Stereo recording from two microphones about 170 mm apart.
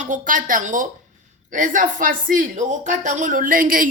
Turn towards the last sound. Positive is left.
turn(degrees=-55)  # may be behind; listen again after turning